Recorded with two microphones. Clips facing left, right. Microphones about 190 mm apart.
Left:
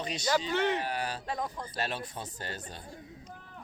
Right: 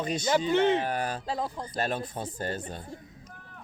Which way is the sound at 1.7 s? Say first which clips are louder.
Right 5 dB; 50° right (ahead or behind).